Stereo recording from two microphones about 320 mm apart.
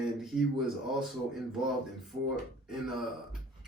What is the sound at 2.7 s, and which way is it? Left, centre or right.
Speech, centre.